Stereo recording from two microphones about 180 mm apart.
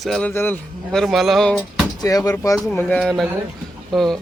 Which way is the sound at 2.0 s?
20° left (ahead or behind).